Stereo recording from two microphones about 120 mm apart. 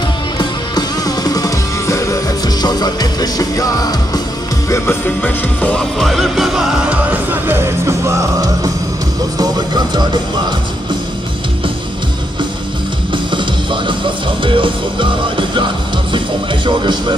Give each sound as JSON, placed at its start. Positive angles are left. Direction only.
{"t": 0.4, "sound": "music", "side_deg": 35}
{"t": 7.1, "sound": "music", "side_deg": -15}
{"t": 9.4, "sound": "speech", "side_deg": -35}
{"t": 13.1, "sound": "music", "side_deg": -40}
{"t": 16.6, "sound": "speech", "side_deg": -40}